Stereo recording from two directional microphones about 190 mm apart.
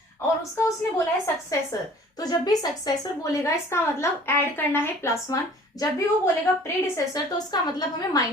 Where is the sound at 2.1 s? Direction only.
20° left (ahead or behind).